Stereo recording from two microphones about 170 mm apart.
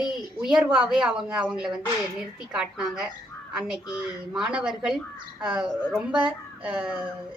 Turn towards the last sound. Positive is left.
turn(degrees=-5)  # may be behind; listen again after turning